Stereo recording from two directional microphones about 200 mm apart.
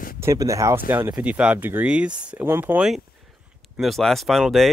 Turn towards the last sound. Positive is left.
turn(degrees=0)  # may be behind; listen again after turning